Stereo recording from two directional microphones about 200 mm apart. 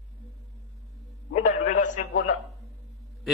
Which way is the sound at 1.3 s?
40° left (ahead or behind).